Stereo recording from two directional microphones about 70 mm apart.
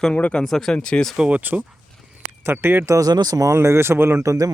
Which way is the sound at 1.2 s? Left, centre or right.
Centre.